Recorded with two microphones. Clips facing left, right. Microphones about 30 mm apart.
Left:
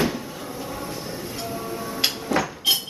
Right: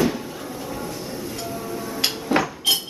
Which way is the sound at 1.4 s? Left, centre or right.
Centre.